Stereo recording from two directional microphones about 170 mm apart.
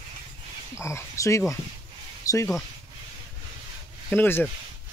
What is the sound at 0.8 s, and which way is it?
Speech, 15° left (ahead or behind).